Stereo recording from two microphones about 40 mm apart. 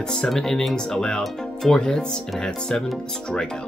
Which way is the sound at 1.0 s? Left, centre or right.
Centre.